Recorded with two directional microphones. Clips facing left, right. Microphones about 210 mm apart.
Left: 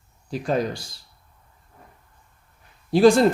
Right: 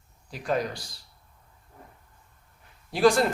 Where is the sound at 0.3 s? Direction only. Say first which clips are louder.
Left 4 dB; 30° left (ahead or behind).